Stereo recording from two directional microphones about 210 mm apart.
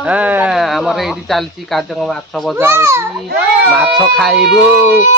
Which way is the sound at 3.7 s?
Centre (ahead or behind).